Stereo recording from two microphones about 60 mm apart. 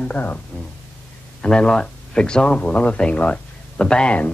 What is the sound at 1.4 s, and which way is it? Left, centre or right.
Speech, centre.